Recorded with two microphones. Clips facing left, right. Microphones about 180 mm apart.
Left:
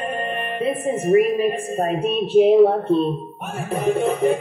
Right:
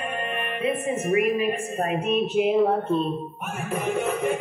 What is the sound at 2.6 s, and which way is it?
Speech, centre (ahead or behind).